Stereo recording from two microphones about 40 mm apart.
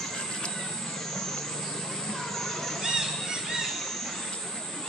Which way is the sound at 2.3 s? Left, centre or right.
Centre.